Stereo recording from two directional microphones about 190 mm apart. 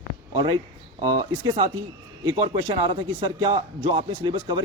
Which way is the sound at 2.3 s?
30° right (ahead or behind).